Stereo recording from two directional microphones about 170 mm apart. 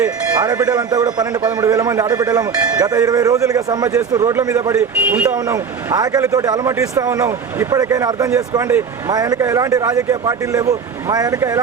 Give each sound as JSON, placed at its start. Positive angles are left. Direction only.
{"t": 0.3, "sound": "speech", "side_deg": -20}
{"t": 4.8, "sound": "speech", "side_deg": -10}
{"t": 5.9, "sound": "speech", "side_deg": -20}